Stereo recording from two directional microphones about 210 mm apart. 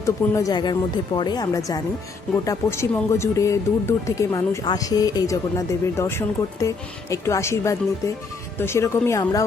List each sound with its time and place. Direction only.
0.0 s speech: 15° left (ahead or behind)